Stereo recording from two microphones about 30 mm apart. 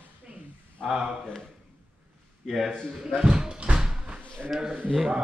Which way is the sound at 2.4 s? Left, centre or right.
Centre.